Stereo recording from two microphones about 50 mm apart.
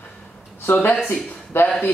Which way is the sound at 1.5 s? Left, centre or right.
Left.